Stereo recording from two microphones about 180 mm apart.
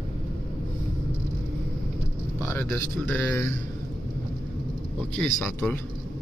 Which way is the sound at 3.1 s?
15° left (ahead or behind).